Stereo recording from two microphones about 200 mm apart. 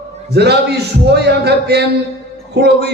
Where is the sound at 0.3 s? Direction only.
55° right (ahead or behind).